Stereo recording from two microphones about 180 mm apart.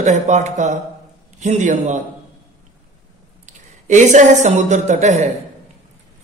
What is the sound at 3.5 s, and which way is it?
A woman's voice, 45° right (ahead or behind).